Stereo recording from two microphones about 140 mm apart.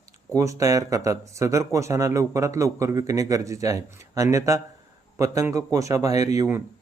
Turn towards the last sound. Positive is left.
turn(degrees=-25)  # may be behind; listen again after turning